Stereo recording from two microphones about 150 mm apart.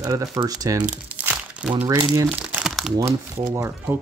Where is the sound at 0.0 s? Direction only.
25° right (ahead or behind).